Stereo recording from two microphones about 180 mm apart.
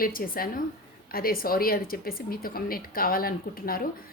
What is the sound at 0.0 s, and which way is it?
A woman's voice, 55° left (ahead or behind).